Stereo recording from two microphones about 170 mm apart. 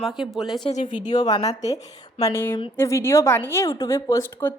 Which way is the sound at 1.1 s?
25° left (ahead or behind).